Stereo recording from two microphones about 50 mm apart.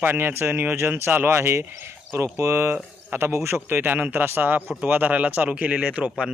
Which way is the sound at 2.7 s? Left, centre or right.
Right.